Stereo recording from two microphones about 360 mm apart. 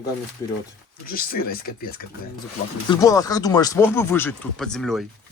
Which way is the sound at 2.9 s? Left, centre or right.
Centre.